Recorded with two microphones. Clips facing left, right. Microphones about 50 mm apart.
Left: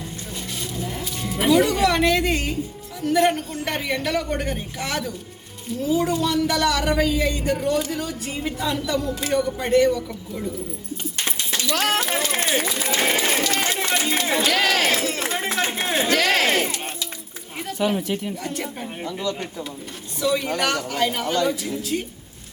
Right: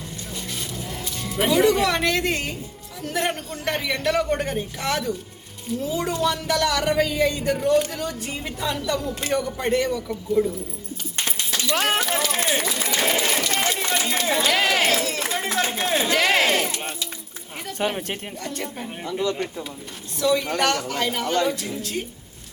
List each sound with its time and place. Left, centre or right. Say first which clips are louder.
1.2 s a man's voice: left 1 dB; centre
12.2 s run: left 1 dB; left
14.4 s speech: even; centre
14.8 s a sound: even; left
16.0 s a sound: even; right
16.5 s music: left 1 dB; left
17.7 s speech: left 3 dB; right
18.4 s speech: left 2 dB; centre
20.1 s a man's voice: right 1 dB; centre